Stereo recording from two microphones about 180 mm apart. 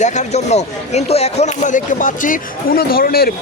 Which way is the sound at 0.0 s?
40° left (ahead or behind).